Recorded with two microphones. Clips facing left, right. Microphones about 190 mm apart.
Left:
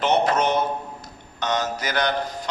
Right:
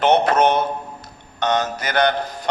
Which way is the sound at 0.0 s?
60° right (ahead or behind).